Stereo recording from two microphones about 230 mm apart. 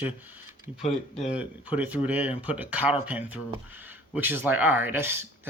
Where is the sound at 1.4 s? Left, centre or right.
Centre.